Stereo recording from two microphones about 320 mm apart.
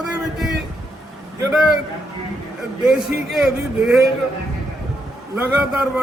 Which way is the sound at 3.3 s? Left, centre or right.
Centre.